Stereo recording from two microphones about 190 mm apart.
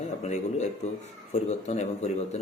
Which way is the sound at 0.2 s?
35° left (ahead or behind).